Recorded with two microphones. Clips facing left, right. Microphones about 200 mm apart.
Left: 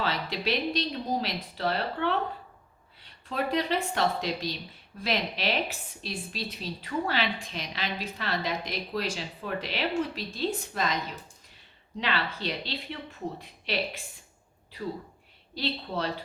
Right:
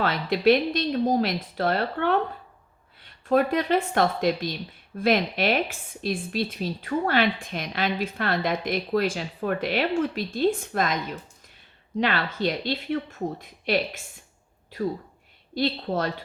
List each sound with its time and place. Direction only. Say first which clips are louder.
0.0 s a woman's voice: right 9 dB; 55° right (ahead or behind)
11.9 s a woman's voice: right 6 dB; 50° right (ahead or behind)
15.5 s a woman's voice: right 6 dB; 50° right (ahead or behind)